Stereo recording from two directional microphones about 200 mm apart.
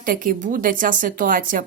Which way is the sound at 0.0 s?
45° right (ahead or behind).